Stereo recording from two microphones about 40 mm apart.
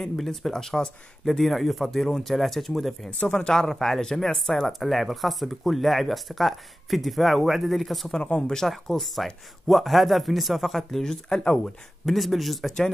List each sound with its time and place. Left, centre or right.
0.0 s speech: centre
1.2 s speech: centre
3.3 s speech: centre
4.8 s speech: centre
8.4 s speech: centre
12.1 s speech: centre